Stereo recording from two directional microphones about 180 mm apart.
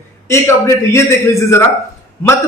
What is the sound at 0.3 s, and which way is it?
Speech, 15° left (ahead or behind).